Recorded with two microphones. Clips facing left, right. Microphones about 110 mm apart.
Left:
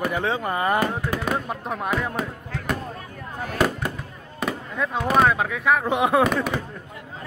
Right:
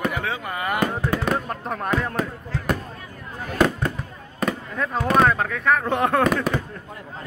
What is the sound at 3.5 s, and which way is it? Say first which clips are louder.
Fireworks: right 3 dB; 5° left (ahead or behind).